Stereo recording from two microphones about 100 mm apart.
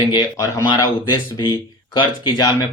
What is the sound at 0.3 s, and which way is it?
Speech, 30° left (ahead or behind).